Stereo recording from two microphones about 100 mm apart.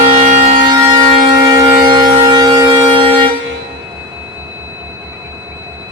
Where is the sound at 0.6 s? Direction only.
45° right (ahead or behind).